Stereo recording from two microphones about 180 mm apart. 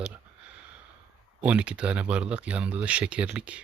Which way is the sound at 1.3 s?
5° right (ahead or behind).